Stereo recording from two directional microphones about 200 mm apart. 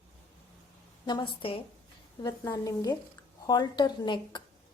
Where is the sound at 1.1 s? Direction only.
25° left (ahead or behind).